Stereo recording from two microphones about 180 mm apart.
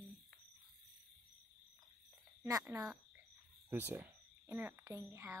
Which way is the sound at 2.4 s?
20° right (ahead or behind).